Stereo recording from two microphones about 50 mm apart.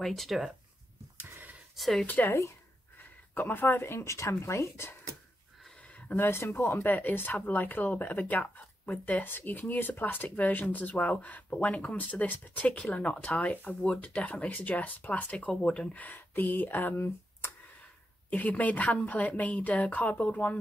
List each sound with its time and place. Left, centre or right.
0.0 s speech: centre
2.0 s speech: left
4.0 s speech: left
5.8 s a sound: left
6.1 s speech: left
6.4 s speech: left
16.0 s speech: left
18.3 s speech: left